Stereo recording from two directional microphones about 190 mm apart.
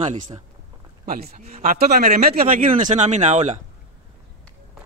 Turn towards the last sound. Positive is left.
turn(degrees=-40)  # may be behind; listen again after turning